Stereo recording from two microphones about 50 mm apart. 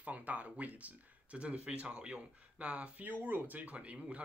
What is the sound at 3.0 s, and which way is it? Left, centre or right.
Speech, right.